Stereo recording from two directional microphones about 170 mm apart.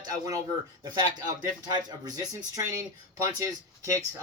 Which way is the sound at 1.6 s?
25° right (ahead or behind).